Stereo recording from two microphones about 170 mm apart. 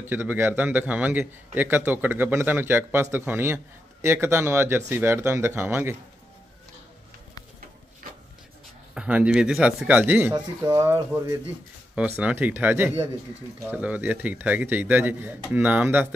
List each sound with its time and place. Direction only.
0.0 s a man's voice: 10° right (ahead or behind)
8.9 s a man's voice: 5° right (ahead or behind)
12.2 s a man's voice: 10° right (ahead or behind)